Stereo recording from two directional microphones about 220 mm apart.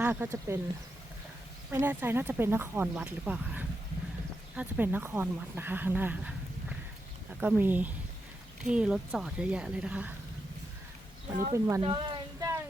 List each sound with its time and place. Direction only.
0.0 s speech: 10° right (ahead or behind)
1.7 s a woman's voice: 10° right (ahead or behind)
11.5 s a sound: 15° right (ahead or behind)